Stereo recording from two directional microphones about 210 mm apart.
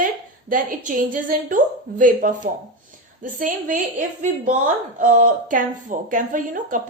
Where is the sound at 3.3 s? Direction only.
40° right (ahead or behind).